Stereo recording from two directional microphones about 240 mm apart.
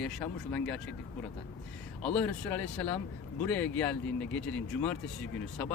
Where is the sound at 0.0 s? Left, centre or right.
Centre.